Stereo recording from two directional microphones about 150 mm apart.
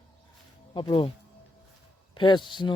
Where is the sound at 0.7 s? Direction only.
30° left (ahead or behind).